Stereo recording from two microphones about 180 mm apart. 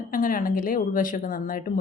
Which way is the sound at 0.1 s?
50° left (ahead or behind).